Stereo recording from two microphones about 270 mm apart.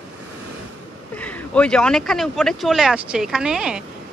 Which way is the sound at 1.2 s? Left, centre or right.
Centre.